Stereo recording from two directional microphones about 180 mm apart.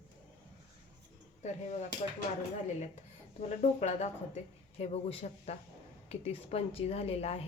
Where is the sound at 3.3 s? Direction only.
40° left (ahead or behind).